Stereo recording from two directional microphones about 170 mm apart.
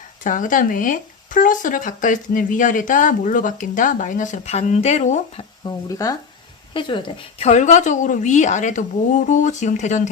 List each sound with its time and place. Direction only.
0.3 s speech: 50° left (ahead or behind)
5.6 s speech: 20° left (ahead or behind); by 10.1 s 45° left (ahead or behind)